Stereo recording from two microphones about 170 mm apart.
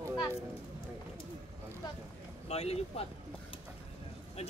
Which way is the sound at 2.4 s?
40° left (ahead or behind).